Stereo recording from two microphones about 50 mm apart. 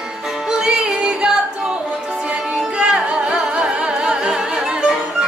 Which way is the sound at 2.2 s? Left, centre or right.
Centre.